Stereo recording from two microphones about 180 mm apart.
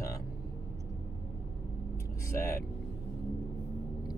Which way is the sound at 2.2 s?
15° left (ahead or behind).